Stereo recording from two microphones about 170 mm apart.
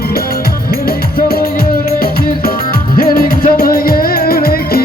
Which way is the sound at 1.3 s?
60° left (ahead or behind).